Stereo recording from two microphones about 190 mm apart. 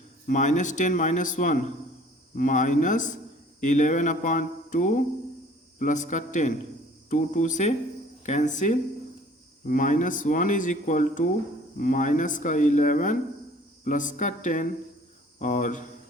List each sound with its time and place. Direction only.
0.3 s speech: 40° left (ahead or behind)